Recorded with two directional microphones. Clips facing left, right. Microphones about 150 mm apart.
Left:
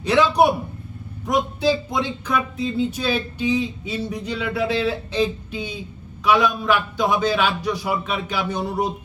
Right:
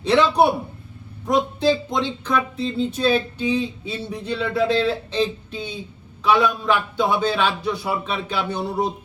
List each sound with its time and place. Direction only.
0.0 s speech: 10° left (ahead or behind)